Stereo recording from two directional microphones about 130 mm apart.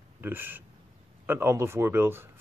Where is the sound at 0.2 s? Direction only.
15° right (ahead or behind).